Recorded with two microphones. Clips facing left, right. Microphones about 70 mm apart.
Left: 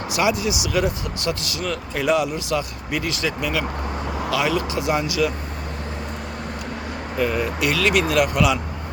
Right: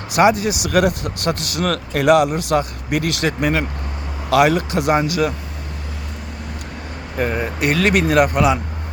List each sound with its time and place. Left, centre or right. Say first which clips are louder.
0.1 s speech: right 7 dB; right
7.2 s speech: right 1 dB; right